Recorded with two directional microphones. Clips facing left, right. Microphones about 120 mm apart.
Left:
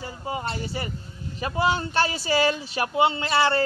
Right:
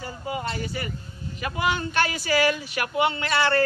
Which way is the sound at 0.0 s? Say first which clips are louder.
Even; 30° left (ahead or behind).